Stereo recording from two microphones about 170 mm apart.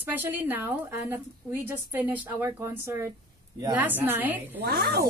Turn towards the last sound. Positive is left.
turn(degrees=-65)  # may be behind; listen again after turning